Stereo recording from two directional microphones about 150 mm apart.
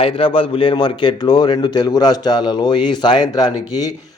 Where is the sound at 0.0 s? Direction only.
35° left (ahead or behind).